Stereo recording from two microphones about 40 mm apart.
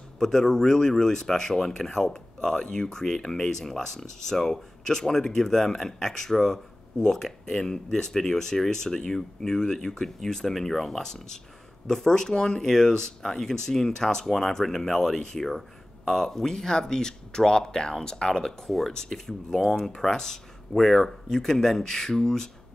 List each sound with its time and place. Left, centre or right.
0.2 s speech: centre
18.7 s speech: centre
18.9 s speech: centre